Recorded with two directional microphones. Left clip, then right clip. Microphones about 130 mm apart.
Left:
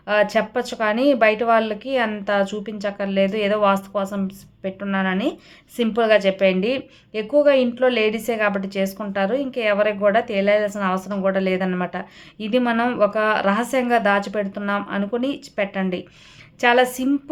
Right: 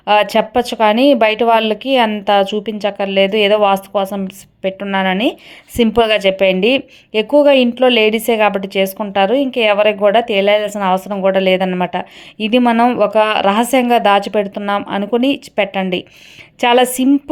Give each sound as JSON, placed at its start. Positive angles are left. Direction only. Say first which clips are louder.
{"t": 0.0, "sound": "a woman's voice", "louder": "right 6 dB", "side_deg": -50}